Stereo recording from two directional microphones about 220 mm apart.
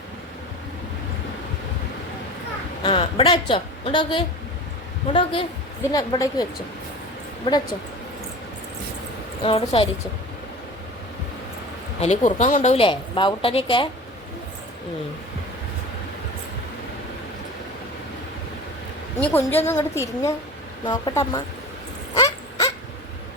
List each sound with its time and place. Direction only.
2.8 s a woman's voice: 25° left (ahead or behind)
9.4 s speech: 25° left (ahead or behind)
11.9 s speech: 30° left (ahead or behind)
19.2 s a woman's voice: 10° left (ahead or behind)
22.1 s dog: 15° left (ahead or behind)